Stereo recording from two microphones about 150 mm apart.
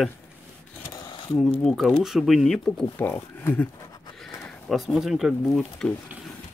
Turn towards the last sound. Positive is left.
turn(degrees=0)  # may be behind; listen again after turning